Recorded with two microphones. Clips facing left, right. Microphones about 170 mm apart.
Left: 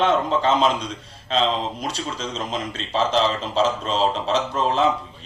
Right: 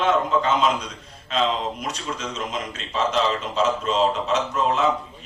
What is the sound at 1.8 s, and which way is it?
A man's voice, 30° left (ahead or behind).